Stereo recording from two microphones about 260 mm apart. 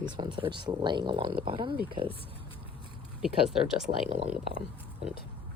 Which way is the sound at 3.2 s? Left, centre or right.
Centre.